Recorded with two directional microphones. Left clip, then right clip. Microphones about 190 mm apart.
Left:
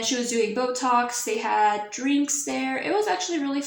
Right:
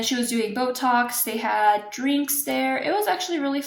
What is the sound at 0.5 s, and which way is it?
Speech, 35° right (ahead or behind).